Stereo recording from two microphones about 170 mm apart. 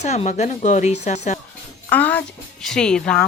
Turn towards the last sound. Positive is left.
turn(degrees=5)  # may be behind; listen again after turning